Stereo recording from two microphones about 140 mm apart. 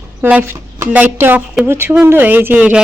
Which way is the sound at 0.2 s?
15° right (ahead or behind).